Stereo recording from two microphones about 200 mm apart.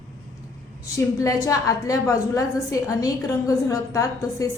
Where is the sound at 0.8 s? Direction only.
15° left (ahead or behind).